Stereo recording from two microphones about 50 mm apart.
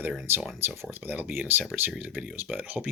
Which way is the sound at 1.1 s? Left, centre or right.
Right.